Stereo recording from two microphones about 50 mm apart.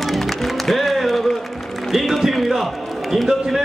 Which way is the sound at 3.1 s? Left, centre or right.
Centre.